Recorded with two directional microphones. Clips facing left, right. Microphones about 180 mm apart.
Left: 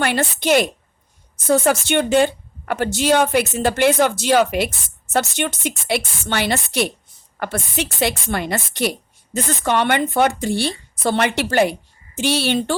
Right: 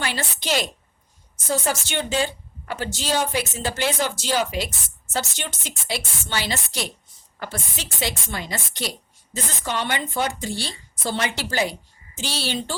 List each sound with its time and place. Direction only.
0.0 s a woman's voice: 60° left (ahead or behind)